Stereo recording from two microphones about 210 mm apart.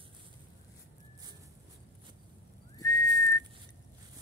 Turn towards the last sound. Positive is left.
turn(degrees=15)  # may be behind; listen again after turning